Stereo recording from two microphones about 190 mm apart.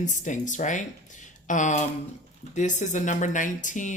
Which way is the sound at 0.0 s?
40° left (ahead or behind).